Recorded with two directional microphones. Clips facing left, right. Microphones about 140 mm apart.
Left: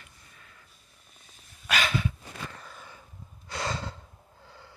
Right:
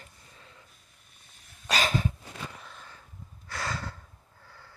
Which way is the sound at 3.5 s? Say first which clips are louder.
Left 2 dB; 25° left (ahead or behind).